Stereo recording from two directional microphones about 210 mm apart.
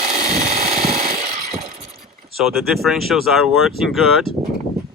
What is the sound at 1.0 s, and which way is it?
Jackhammer, 30° right (ahead or behind).